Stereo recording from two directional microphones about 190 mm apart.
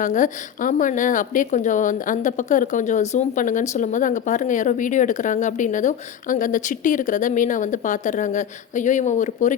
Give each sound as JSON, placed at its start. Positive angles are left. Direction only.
{"t": 0.0, "sound": "a woman's voice", "side_deg": 40}